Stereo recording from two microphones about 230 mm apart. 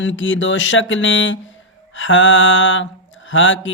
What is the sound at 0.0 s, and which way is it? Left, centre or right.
Mantra, left.